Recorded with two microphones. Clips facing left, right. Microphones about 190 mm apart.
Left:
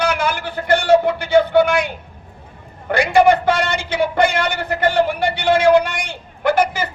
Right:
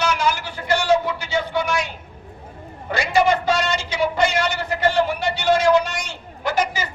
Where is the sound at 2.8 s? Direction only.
55° left (ahead or behind).